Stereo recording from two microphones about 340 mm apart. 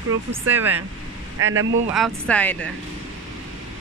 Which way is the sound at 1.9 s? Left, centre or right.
Centre.